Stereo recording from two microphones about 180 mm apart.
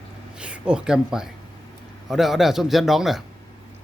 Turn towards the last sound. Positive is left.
turn(degrees=0)  # may be behind; listen again after turning